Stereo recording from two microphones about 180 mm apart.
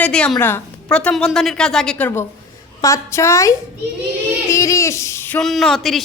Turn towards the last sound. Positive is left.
turn(degrees=0)  # may be behind; listen again after turning